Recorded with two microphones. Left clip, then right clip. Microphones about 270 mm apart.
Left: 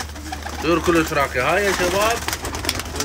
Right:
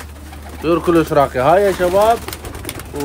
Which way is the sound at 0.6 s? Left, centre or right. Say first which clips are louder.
Right 4 dB; centre.